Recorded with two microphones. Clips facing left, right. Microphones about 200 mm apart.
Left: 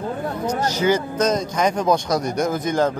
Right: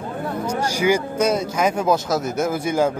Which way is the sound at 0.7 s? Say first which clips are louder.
Right 1 dB; 10° right (ahead or behind).